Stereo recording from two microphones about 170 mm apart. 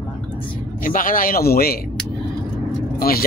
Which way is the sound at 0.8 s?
55° left (ahead or behind).